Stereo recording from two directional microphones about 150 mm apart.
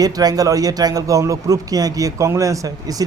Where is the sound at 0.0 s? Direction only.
25° right (ahead or behind).